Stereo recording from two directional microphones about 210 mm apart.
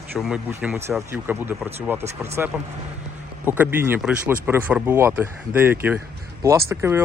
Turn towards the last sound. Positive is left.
turn(degrees=-10)  # may be behind; listen again after turning